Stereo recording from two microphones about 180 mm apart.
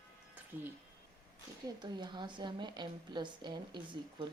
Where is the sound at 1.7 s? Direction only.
25° right (ahead or behind).